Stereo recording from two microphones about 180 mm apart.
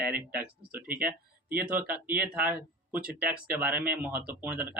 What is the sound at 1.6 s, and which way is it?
Speech, 10° right (ahead or behind).